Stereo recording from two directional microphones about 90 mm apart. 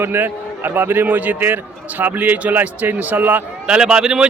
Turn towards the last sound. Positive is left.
turn(degrees=-10)  # may be behind; listen again after turning